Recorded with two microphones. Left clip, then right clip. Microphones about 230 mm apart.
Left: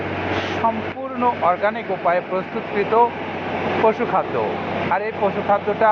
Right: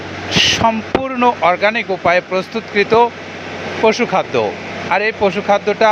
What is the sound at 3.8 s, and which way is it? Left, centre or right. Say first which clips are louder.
Speech: right 6 dB; right.